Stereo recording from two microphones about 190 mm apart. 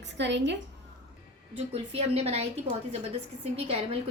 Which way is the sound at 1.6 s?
35° right (ahead or behind).